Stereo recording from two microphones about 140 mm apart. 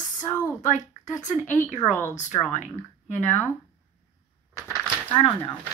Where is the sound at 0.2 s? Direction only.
65° left (ahead or behind).